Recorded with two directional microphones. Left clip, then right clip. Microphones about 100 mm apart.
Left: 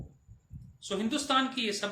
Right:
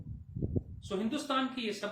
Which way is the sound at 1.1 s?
30° left (ahead or behind).